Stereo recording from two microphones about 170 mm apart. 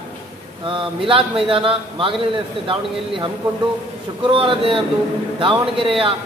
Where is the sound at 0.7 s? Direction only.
30° right (ahead or behind).